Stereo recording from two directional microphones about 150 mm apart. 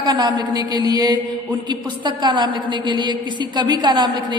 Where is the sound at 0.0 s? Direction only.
30° right (ahead or behind).